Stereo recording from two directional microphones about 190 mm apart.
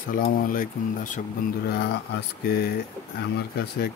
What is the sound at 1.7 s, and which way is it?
Speech, 55° left (ahead or behind).